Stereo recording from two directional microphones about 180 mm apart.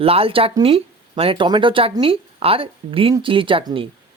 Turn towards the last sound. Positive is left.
turn(degrees=-25)  # may be behind; listen again after turning